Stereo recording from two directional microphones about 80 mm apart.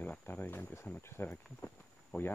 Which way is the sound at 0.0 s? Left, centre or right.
Left.